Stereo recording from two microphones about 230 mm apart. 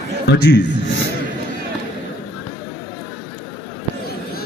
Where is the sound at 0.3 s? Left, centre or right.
Left.